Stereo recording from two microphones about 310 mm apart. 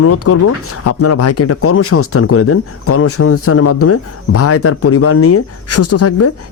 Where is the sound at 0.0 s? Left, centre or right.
Left.